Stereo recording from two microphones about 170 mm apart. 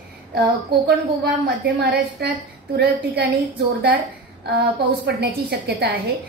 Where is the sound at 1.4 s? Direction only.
80° right.